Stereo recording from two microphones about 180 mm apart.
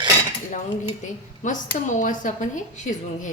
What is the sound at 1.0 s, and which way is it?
A woman's voice, 45° left (ahead or behind).